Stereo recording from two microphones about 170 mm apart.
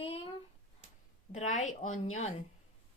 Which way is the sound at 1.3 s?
45° left (ahead or behind).